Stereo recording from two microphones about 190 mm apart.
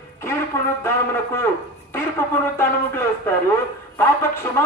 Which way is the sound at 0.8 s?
10° left (ahead or behind).